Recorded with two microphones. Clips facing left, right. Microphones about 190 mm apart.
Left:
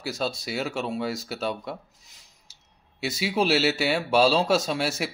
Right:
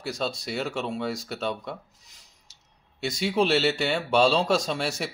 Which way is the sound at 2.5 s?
Centre (ahead or behind).